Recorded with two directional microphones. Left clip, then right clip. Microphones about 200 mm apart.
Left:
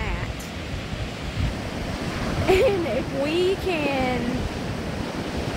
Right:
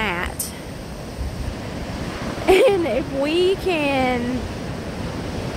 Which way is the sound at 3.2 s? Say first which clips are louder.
Right 4 dB; 30° right (ahead or behind).